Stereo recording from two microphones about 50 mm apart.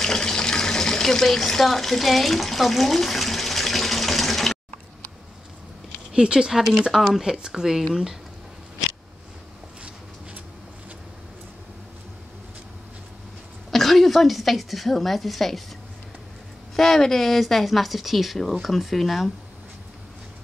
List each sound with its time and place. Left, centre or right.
0.0 s water tap: centre
6.1 s speech: centre
6.8 s speech: centre
13.7 s a woman's voice: centre
16.7 s speech: centre